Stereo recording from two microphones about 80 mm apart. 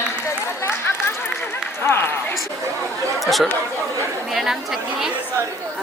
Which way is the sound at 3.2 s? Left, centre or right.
Centre.